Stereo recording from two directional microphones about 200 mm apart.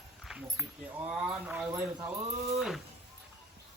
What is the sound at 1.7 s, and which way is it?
Speech, 15° right (ahead or behind).